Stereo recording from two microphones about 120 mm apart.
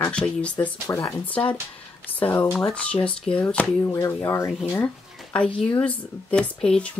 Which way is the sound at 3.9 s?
25° left (ahead or behind).